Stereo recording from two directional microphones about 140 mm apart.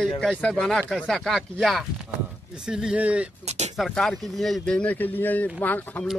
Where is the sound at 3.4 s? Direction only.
55° right (ahead or behind).